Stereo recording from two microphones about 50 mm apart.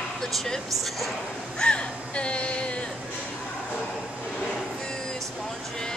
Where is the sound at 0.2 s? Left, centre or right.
Centre.